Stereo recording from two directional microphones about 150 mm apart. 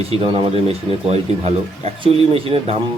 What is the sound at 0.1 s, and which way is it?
Speech, 40° right (ahead or behind).